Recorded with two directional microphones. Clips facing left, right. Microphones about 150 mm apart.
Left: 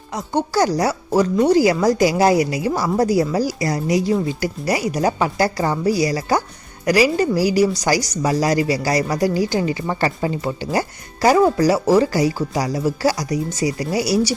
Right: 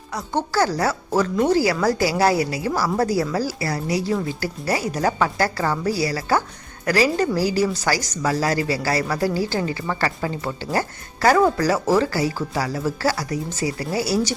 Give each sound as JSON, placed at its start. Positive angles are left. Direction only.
{"t": 0.1, "sound": "speech", "side_deg": 20}